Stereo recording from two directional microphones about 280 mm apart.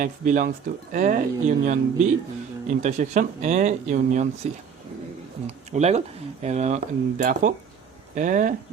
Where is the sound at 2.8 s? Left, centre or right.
Right.